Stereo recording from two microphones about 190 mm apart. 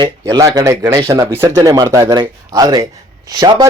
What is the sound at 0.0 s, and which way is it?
Speech, 20° right (ahead or behind).